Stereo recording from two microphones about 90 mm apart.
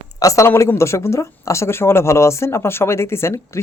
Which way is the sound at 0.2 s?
35° left (ahead or behind).